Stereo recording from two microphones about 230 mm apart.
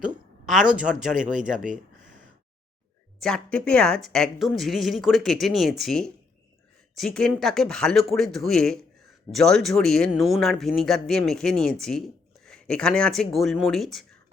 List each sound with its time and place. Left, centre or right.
0.0 s a woman's voice: centre
1.1 s speech: right
3.2 s speech: centre